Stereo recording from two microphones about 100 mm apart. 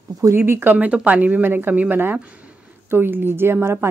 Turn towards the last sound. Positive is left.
turn(degrees=-25)  # may be behind; listen again after turning